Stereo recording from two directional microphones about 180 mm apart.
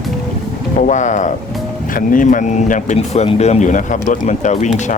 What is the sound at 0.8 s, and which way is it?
Speech, 45° left (ahead or behind).